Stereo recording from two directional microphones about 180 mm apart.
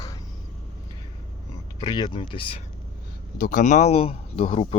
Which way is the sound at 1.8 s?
25° left (ahead or behind).